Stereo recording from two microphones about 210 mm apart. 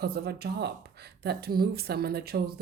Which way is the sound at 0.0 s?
50° right (ahead or behind).